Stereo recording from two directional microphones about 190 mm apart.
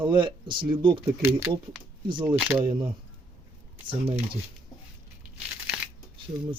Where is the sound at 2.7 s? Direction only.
25° right (ahead or behind).